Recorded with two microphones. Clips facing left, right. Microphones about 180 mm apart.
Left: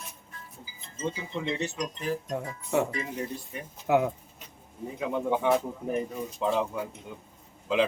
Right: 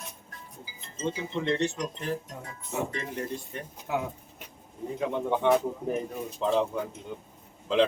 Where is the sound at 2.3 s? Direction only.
75° left (ahead or behind).